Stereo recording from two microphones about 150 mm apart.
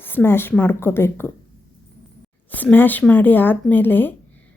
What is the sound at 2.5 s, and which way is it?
A woman's voice, 10° left (ahead or behind).